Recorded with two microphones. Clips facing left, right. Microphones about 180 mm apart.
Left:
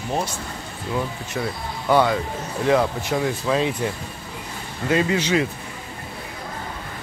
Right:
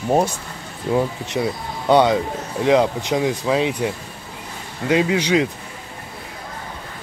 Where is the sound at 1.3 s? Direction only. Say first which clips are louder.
Right 4 dB; 20° right (ahead or behind).